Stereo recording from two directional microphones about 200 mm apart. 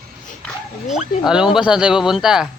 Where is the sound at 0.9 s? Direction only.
5° right (ahead or behind).